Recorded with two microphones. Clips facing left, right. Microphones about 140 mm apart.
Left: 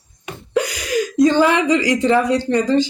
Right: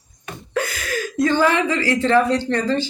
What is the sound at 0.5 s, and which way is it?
Speech, 15° left (ahead or behind).